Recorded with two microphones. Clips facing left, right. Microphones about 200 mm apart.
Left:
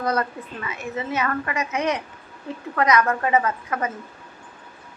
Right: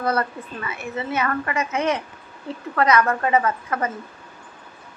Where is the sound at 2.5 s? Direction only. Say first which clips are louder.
Right 1 dB; 15° left (ahead or behind).